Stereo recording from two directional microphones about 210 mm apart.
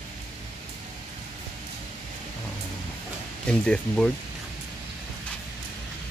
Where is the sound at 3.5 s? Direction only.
5° left (ahead or behind).